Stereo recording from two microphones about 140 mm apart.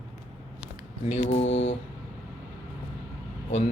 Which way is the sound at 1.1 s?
55° left (ahead or behind).